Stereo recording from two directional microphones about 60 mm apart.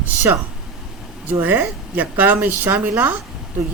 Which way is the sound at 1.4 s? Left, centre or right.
Right.